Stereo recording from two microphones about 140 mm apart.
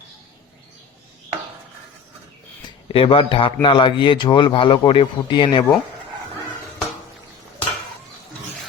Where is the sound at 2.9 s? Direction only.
40° left (ahead or behind).